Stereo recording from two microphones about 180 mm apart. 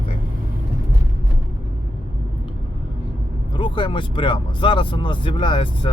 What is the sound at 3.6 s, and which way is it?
Speech, 30° left (ahead or behind).